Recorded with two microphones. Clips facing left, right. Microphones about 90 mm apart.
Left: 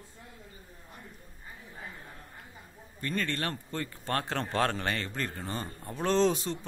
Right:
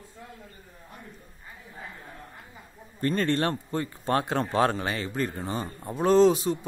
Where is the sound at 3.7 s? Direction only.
15° right (ahead or behind).